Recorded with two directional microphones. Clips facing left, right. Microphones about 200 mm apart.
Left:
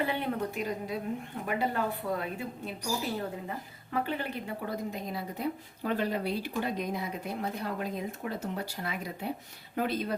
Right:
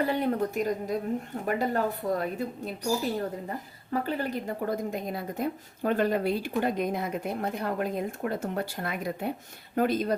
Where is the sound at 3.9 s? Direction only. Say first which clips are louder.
Right 3 dB; 40° right (ahead or behind).